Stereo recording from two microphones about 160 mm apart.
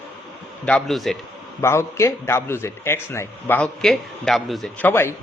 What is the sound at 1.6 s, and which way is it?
Speech, 15° left (ahead or behind).